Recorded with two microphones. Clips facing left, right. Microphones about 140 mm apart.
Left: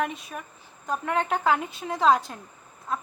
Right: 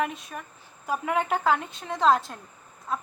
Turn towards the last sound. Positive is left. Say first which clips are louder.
# even
turn(degrees=-5)  # may be behind; listen again after turning